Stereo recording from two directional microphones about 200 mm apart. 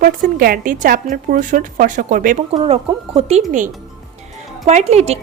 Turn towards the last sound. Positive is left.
turn(degrees=-30)  # may be behind; listen again after turning